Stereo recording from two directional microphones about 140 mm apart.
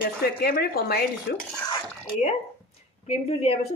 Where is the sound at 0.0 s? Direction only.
90° left.